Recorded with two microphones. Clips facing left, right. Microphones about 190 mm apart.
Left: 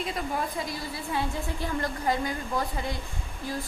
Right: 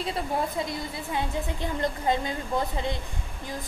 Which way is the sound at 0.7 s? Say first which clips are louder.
Right 1 dB; 20° right (ahead or behind).